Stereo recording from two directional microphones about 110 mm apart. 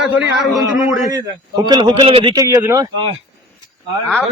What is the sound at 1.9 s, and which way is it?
Speech, 60° right (ahead or behind).